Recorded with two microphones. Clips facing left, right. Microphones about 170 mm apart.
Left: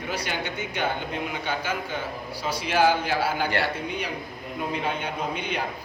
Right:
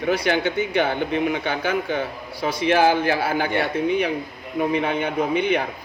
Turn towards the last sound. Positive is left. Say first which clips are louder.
# right 9 dB
turn(degrees=-60)  # may be behind; listen again after turning